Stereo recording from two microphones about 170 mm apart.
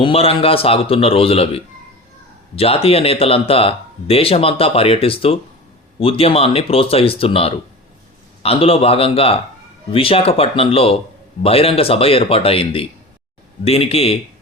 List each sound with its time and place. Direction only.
0.0 s speech: 35° left (ahead or behind)